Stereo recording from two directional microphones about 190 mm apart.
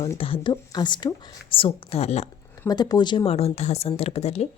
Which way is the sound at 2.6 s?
20° left (ahead or behind).